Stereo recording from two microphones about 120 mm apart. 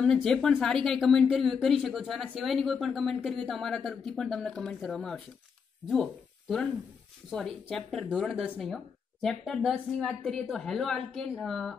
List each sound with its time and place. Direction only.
0.0 s a woman's voice: 5° left (ahead or behind)
7.2 s a woman's voice: centre (ahead or behind)